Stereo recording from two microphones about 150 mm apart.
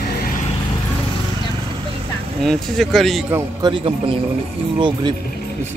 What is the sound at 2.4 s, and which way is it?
Speech, centre (ahead or behind).